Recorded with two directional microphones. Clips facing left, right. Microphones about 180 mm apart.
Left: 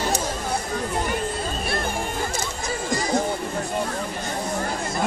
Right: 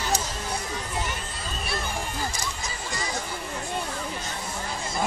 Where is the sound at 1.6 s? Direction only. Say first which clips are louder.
Left 2 dB; 55° left (ahead or behind).